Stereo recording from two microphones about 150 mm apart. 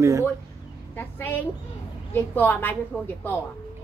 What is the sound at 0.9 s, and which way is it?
A woman's voice, 15° left (ahead or behind).